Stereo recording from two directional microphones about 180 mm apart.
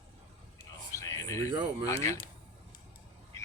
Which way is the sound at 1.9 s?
15° left (ahead or behind).